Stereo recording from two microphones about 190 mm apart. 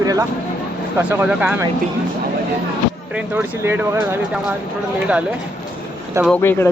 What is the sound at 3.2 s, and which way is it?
Speech, 10° right (ahead or behind).